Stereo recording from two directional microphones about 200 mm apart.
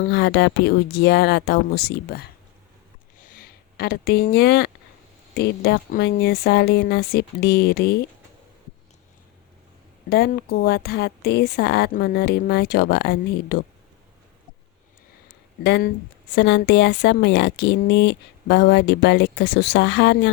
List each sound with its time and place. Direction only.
0.0 s a woman's voice: 55° left (ahead or behind)
3.2 s a sound: 45° left (ahead or behind)
5.3 s speech: 55° left (ahead or behind)
10.1 s a woman's voice: 50° left (ahead or behind)
15.6 s speech: 55° left (ahead or behind)